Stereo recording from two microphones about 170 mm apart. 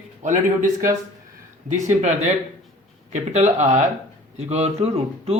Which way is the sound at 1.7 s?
45° right (ahead or behind).